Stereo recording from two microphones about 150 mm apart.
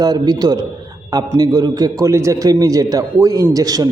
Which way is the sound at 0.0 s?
25° right (ahead or behind).